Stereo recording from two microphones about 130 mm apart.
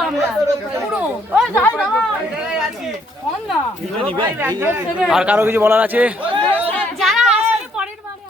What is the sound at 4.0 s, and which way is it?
Speech, 45° right (ahead or behind).